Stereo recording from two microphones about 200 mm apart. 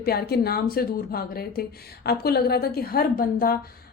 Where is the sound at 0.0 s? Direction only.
50° left (ahead or behind).